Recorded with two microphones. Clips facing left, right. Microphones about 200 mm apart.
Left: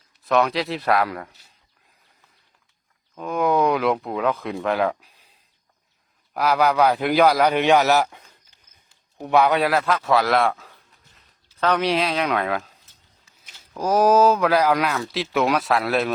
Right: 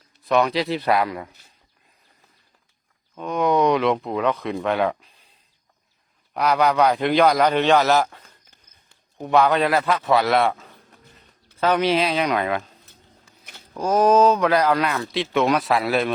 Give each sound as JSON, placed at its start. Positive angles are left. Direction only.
{"t": 0.3, "sound": "speech", "side_deg": 0}
{"t": 3.2, "sound": "speech", "side_deg": 0}
{"t": 6.3, "sound": "a man's voice", "side_deg": 0}
{"t": 12.8, "sound": "a sound", "side_deg": -55}
{"t": 13.7, "sound": "speech", "side_deg": 10}